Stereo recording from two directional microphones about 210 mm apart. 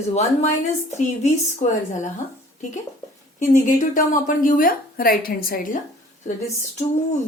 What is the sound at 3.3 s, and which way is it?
Speech, 35° left (ahead or behind).